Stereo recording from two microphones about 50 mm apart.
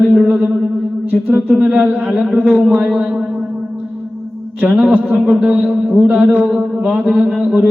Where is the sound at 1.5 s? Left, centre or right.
Right.